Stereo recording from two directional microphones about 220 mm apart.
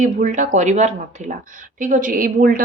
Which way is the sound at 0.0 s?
35° right (ahead or behind).